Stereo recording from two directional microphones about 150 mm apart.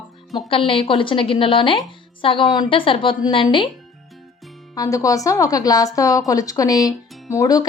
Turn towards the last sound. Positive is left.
turn(degrees=25)  # may be behind; listen again after turning